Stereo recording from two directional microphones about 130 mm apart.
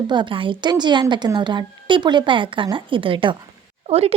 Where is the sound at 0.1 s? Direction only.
40° right (ahead or behind).